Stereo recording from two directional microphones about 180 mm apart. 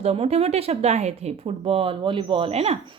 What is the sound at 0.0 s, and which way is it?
Speech, 35° right (ahead or behind).